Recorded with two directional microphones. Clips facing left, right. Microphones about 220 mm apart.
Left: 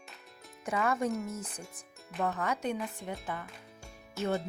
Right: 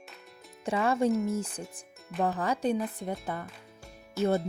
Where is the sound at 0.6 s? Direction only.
30° right (ahead or behind).